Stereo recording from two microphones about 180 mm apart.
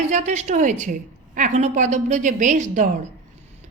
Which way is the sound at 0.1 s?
40° right (ahead or behind).